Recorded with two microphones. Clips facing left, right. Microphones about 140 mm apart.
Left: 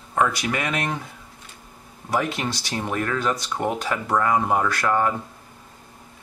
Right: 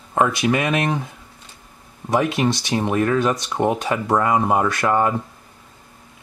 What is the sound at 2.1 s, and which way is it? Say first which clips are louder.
Speech: right 6 dB; 20° right (ahead or behind).